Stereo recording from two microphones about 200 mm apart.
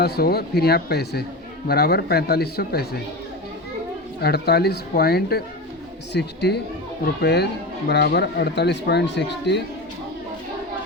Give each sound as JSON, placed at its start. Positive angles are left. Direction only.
{"t": 0.0, "sound": "speech", "side_deg": 50}
{"t": 4.2, "sound": "speech", "side_deg": 55}